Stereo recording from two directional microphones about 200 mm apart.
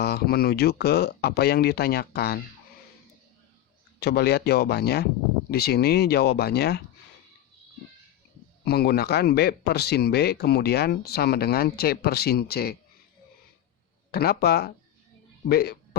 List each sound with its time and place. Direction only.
0.0 s speech: 50° left (ahead or behind)
4.0 s speech: 55° left (ahead or behind)
8.6 s speech: 55° left (ahead or behind)
14.1 s speech: 50° left (ahead or behind)